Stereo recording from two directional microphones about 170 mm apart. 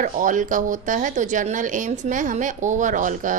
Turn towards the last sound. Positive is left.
turn(degrees=-50)  # may be behind; listen again after turning